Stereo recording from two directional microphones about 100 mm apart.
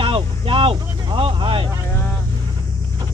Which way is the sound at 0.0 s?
60° right (ahead or behind).